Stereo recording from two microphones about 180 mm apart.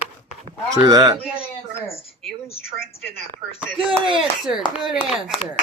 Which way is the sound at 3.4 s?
20° right (ahead or behind).